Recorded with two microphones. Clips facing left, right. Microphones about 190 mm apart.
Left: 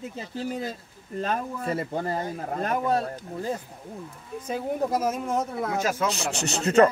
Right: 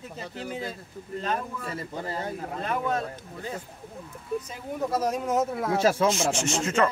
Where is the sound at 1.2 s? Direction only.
40° left (ahead or behind).